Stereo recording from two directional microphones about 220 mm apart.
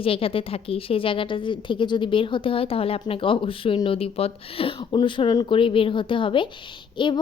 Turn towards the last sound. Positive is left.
turn(degrees=20)  # may be behind; listen again after turning